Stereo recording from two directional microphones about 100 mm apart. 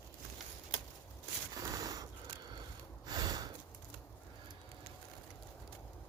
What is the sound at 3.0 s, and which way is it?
Snort, 40° right (ahead or behind).